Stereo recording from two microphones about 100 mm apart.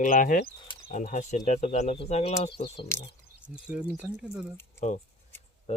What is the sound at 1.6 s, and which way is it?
Speech, 90° left.